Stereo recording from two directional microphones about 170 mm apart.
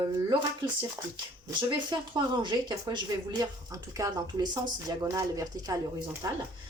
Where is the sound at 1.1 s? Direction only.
25° right (ahead or behind).